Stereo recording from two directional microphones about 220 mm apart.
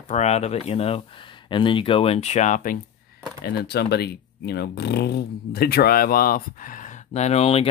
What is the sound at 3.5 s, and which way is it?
Speech, 45° left (ahead or behind).